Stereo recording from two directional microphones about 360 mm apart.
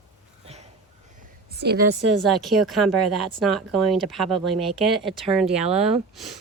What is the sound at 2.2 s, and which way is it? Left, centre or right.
Speech, centre.